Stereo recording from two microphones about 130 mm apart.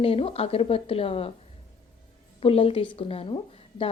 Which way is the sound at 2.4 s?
45° left (ahead or behind).